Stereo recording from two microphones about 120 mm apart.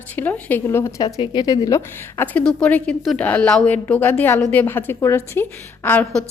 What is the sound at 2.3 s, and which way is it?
A woman's voice, 10° left (ahead or behind).